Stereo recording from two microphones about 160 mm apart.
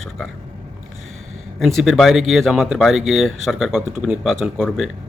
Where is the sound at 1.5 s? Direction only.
Centre (ahead or behind).